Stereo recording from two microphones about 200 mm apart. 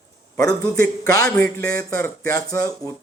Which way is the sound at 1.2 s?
5° left (ahead or behind).